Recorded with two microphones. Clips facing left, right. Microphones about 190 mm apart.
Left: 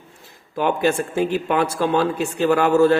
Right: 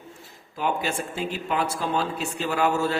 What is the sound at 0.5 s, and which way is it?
Speech, 55° left (ahead or behind).